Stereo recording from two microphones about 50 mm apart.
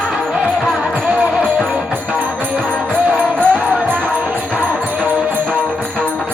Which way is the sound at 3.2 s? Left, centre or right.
Right.